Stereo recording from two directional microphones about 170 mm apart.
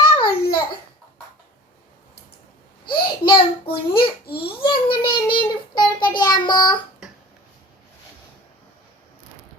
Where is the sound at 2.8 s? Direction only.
60° left (ahead or behind).